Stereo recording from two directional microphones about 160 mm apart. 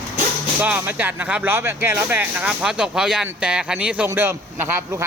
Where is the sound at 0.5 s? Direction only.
10° right (ahead or behind).